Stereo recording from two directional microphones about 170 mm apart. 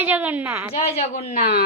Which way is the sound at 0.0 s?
10° right (ahead or behind).